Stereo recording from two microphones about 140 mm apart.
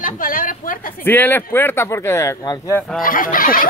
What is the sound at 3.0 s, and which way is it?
Speech, 80° left.